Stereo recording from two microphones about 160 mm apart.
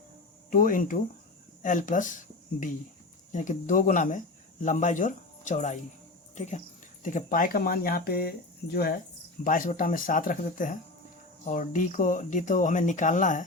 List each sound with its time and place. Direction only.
0.5 s speech: 60° left (ahead or behind); by 9.0 s 75° left (ahead or behind)
9.4 s speech: 55° left (ahead or behind)